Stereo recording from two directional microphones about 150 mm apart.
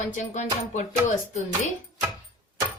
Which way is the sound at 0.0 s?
55° left (ahead or behind).